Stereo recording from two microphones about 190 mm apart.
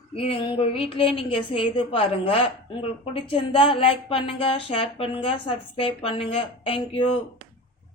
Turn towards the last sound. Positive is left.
turn(degrees=30)  # may be behind; listen again after turning